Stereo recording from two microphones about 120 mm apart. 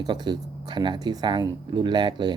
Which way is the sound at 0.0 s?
35° right (ahead or behind).